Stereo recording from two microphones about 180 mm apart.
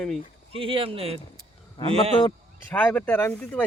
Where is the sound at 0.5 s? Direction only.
30° right (ahead or behind).